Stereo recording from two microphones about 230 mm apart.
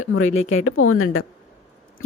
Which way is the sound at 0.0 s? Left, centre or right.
Left.